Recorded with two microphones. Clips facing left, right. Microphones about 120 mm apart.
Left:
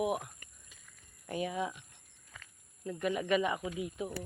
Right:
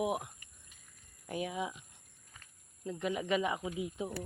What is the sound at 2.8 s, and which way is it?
Speech, 15° right (ahead or behind).